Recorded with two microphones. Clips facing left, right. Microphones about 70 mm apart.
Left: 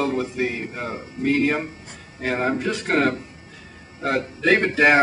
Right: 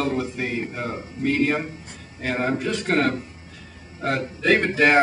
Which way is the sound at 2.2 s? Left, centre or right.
Centre.